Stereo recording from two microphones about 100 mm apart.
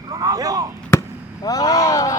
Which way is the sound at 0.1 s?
40° right (ahead or behind).